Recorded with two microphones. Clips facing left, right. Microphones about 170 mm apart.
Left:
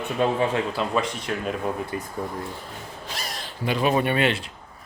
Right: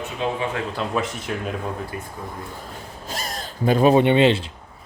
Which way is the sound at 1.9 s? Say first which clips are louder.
Left 2 dB; 30° left (ahead or behind).